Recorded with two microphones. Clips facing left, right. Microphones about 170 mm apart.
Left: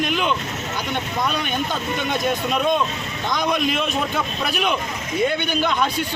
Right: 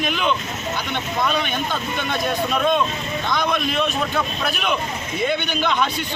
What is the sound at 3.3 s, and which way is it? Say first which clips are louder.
Speech: left 1 dB; 15° left (ahead or behind).